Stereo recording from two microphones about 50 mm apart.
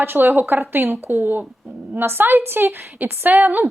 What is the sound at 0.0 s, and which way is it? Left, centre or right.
A woman's voice, right.